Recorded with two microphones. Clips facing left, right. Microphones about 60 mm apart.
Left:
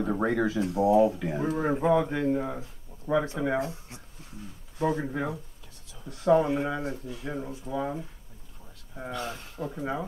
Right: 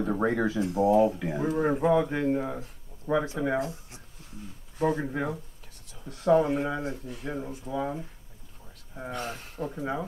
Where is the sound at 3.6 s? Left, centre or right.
Left.